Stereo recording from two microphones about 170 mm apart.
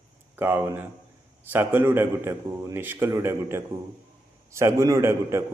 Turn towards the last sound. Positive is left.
turn(degrees=-15)  # may be behind; listen again after turning